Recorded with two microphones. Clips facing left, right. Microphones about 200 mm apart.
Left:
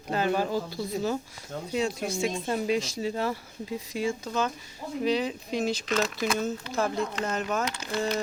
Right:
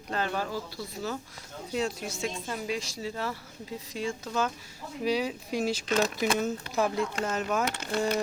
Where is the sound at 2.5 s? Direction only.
20° left (ahead or behind).